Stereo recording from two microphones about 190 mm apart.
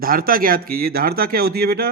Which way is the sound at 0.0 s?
50° right (ahead or behind).